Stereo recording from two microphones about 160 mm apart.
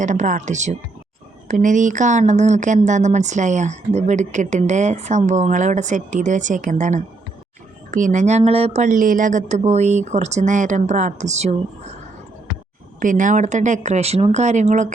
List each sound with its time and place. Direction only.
0.0 s speech: 50° right (ahead or behind)
13.0 s speech: 55° right (ahead or behind)